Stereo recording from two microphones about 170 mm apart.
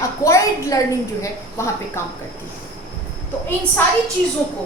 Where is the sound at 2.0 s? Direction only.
15° left (ahead or behind).